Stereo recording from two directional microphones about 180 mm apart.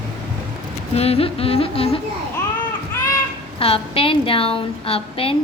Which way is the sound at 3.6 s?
30° left (ahead or behind).